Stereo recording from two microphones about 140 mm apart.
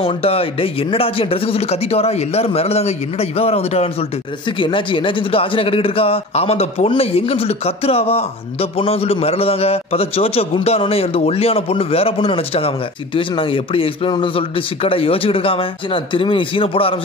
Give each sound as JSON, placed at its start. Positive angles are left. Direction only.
{"t": 0.0, "sound": "a man's voice", "side_deg": 45}
{"t": 4.5, "sound": "a man's voice", "side_deg": 35}